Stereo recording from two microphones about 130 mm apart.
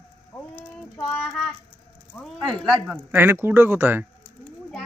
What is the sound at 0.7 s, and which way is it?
Child singing, 5° left (ahead or behind).